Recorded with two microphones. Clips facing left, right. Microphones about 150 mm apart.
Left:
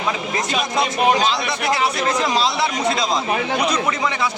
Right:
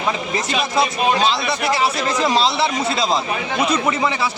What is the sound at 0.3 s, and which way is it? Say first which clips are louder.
Speech: right 2 dB; 5° right (ahead or behind).